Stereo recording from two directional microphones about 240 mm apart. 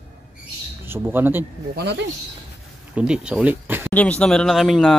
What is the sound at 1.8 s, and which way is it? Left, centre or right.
Speech, right.